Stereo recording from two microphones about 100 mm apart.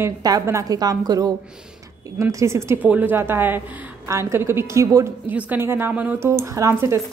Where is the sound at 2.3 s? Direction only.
30° right (ahead or behind).